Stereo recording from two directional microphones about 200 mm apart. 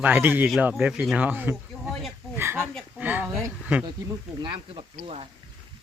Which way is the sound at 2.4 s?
10° right (ahead or behind).